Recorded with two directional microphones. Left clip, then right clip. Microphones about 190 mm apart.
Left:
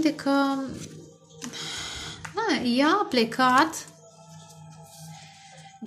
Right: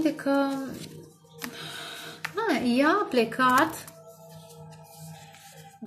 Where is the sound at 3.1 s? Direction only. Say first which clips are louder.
Left 1 dB; 20° left (ahead or behind).